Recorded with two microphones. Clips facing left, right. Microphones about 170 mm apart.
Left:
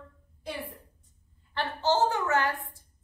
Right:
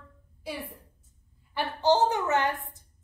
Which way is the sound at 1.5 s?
15° right (ahead or behind).